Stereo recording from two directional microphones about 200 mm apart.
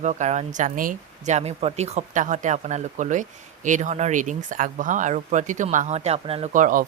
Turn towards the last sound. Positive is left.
turn(degrees=-40)  # may be behind; listen again after turning